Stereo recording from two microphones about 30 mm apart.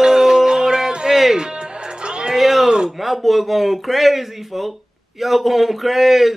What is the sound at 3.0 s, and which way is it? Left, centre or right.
A man's voice, centre.